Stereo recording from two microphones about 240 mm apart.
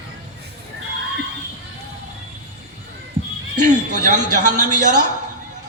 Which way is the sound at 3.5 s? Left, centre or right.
Right.